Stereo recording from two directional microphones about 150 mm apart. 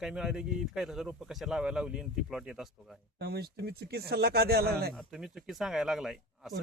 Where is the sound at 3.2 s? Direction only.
90° right.